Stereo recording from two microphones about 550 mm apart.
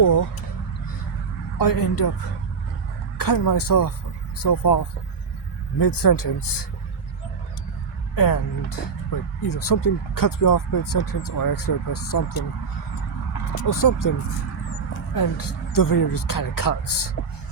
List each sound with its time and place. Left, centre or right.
0.0 s a sound: left
1.5 s speech: left
3.2 s speech: left
8.1 s speech: left
13.6 s speech: left
15.1 s speech: left